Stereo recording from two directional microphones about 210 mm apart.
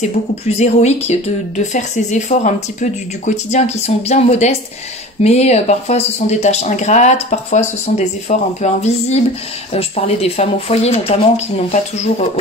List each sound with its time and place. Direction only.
0.6 s speech: 30° left (ahead or behind)